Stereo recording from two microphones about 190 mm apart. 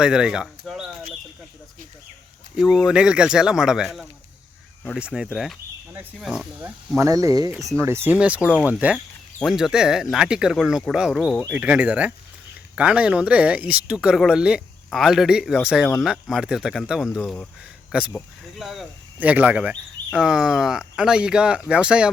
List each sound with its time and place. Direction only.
0.0 s speech: 5° right (ahead or behind)
2.6 s speech: centre (ahead or behind)